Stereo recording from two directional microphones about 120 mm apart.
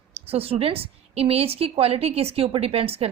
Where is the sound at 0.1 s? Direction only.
55° right (ahead or behind).